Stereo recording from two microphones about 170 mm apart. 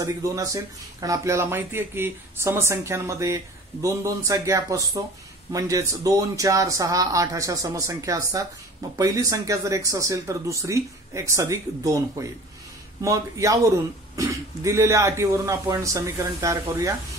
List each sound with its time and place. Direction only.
0.0 s speech: 20° right (ahead or behind)